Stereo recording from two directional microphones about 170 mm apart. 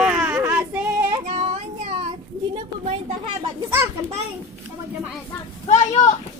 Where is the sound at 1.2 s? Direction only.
35° right (ahead or behind).